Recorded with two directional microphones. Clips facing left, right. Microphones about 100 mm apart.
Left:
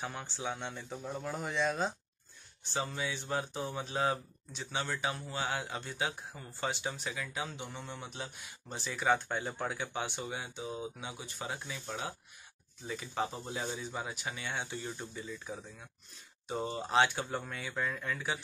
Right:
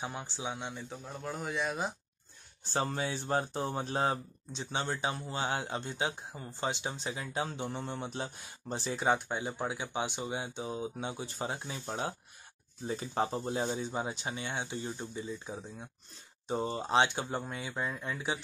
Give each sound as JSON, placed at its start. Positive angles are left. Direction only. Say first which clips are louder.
{"t": 0.0, "sound": "speech", "louder": "right 1 dB", "side_deg": -15}
{"t": 2.6, "sound": "speech", "louder": "right 3 dB", "side_deg": -45}